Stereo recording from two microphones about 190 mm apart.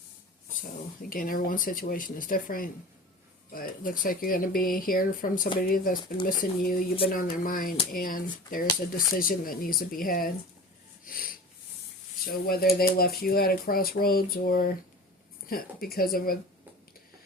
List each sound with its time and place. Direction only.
1.1 s speech: 50° left (ahead or behind)
11.0 s wheeze: 50° left (ahead or behind)
12.2 s speech: 50° left (ahead or behind)